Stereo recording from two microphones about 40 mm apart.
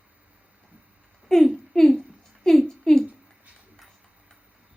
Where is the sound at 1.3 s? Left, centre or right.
Centre.